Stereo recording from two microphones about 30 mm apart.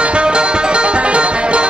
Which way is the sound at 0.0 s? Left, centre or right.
Right.